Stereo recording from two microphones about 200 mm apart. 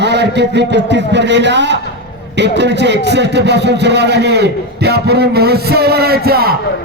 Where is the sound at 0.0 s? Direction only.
60° right (ahead or behind).